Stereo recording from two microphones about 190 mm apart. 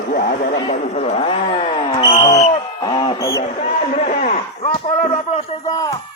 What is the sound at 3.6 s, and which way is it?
A man's voice, 40° left (ahead or behind).